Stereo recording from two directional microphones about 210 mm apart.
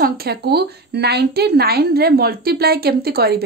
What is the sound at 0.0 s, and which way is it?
Speech, 50° right (ahead or behind).